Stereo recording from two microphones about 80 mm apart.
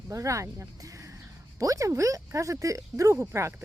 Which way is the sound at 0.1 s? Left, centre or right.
Right.